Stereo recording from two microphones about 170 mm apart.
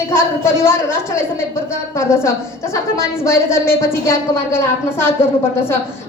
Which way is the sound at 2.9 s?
15° left (ahead or behind).